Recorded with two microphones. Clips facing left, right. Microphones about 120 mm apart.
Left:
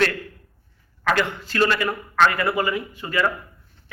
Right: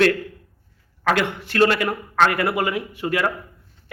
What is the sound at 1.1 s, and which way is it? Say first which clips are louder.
A man's voice: right 1 dB; 65° right (ahead or behind).